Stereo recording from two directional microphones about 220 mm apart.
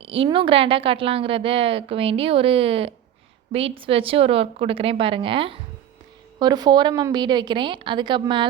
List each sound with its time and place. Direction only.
0.0 s a woman's voice: 25° right (ahead or behind)